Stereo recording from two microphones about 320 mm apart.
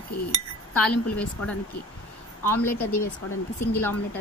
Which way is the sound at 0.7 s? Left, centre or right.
Left.